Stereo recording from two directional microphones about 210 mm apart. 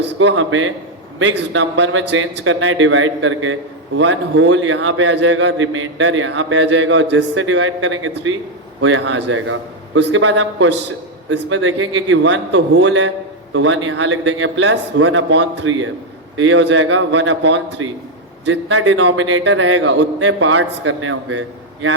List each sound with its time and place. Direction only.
0.0 s speech: 60° right (ahead or behind)